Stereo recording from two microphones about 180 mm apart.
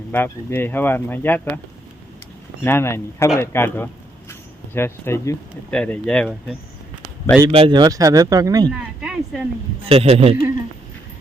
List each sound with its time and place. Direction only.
0.1 s speech: 10° left (ahead or behind)
2.6 s speech: 15° left (ahead or behind)
7.4 s speech: 30° right (ahead or behind)
9.0 s a woman's voice: 5° right (ahead or behind)
9.8 s a man's voice: 35° right (ahead or behind)